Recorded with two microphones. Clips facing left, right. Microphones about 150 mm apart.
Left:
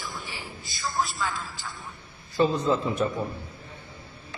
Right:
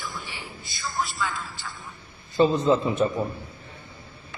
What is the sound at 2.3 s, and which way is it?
Speech, 20° right (ahead or behind).